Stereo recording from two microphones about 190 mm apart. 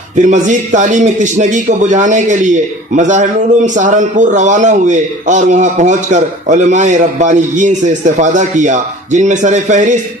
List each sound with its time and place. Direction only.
0.2 s a man's voice: 40° right (ahead or behind)